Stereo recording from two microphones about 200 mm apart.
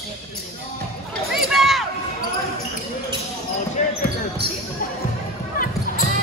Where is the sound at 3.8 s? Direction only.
40° left (ahead or behind).